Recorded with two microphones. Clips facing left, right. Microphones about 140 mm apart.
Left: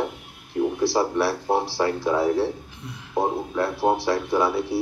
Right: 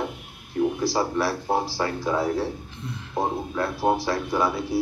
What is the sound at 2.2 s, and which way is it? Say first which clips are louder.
Speech: left 4 dB; 30° left (ahead or behind).